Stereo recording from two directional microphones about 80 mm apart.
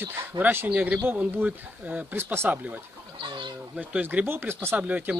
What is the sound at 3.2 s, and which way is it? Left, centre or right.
Chicken, right.